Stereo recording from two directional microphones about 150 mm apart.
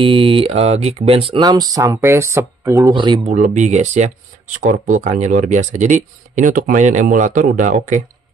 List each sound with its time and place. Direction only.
0.0 s speech: 35° right (ahead or behind)
1.4 s speech: 25° right (ahead or behind)
2.9 s speech: 30° right (ahead or behind)
3.3 s speech: 55° right (ahead or behind)